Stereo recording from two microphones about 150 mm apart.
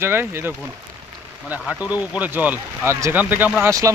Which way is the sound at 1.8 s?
10° right (ahead or behind).